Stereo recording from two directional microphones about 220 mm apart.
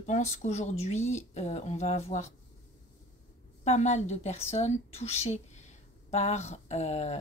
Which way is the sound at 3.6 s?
30° left (ahead or behind).